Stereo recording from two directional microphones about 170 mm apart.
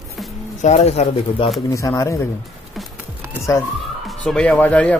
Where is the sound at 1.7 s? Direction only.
20° left (ahead or behind).